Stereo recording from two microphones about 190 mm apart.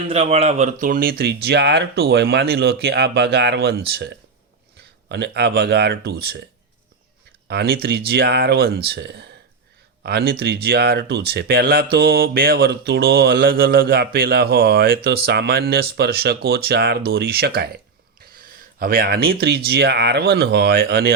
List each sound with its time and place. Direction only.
0.1 s speech: 30° right (ahead or behind); by 6.4 s 60° right (ahead or behind)
7.4 s speech: 55° right (ahead or behind)